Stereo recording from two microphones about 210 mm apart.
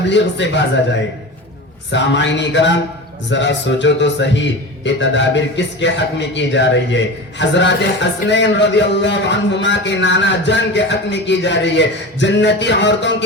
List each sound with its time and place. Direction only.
0.1 s a man's voice: 55° left (ahead or behind)
1.9 s a man's voice: 60° left (ahead or behind)